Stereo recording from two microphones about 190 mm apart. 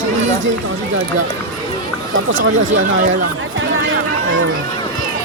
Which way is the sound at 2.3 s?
90° right.